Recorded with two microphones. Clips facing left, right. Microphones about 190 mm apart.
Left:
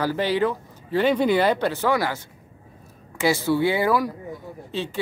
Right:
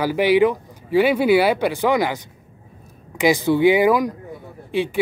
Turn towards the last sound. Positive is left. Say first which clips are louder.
# right 7 dB
turn(degrees=-10)  # may be behind; listen again after turning